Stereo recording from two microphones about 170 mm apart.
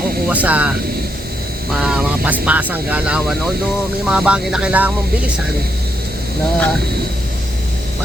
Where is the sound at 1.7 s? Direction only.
5° right (ahead or behind).